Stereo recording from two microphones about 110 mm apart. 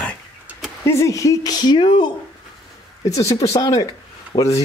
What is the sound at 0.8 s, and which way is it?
Speech, 25° left (ahead or behind).